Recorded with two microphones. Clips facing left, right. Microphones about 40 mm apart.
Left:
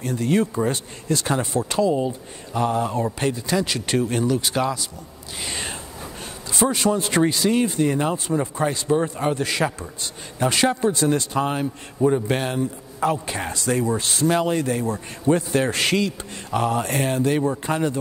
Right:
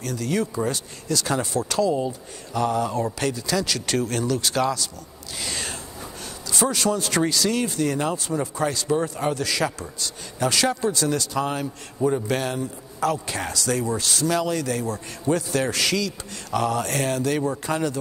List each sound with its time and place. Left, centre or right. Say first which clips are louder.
0.0 s a man's voice: left 4 dB; left; by 17.8 s centre